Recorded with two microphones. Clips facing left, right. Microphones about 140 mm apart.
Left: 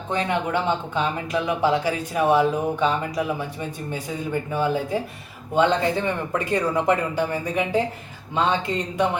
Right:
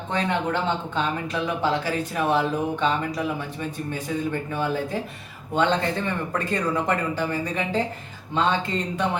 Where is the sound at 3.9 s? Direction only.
10° left (ahead or behind).